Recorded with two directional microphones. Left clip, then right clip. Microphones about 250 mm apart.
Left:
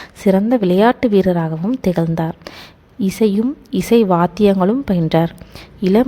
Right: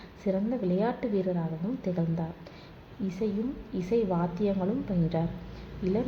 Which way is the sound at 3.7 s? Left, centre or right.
Left.